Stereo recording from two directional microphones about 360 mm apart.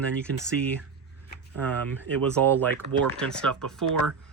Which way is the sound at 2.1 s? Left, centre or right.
Centre.